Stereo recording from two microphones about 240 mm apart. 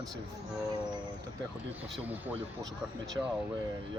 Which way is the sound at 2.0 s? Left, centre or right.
Centre.